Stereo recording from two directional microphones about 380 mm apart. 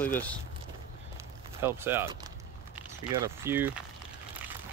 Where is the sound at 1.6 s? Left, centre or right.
Centre.